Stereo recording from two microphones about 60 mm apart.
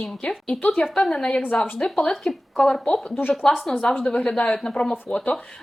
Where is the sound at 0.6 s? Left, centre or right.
Left.